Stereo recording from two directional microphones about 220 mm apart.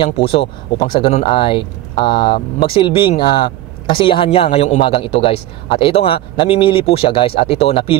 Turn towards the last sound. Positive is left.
turn(degrees=25)  # may be behind; listen again after turning